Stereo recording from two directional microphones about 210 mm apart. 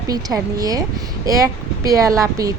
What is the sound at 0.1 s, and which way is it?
Speech, 15° right (ahead or behind).